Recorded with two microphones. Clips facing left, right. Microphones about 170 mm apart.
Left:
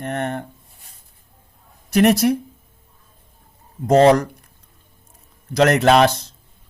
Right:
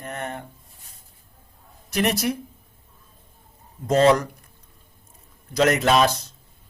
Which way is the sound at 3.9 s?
65° left (ahead or behind).